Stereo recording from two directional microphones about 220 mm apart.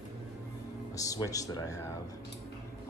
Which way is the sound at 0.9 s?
15° left (ahead or behind).